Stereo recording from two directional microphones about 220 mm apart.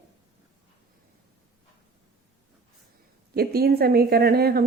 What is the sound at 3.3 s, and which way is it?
Speech, 45° right (ahead or behind).